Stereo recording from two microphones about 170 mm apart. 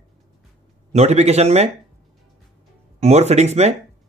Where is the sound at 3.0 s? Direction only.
40° right (ahead or behind).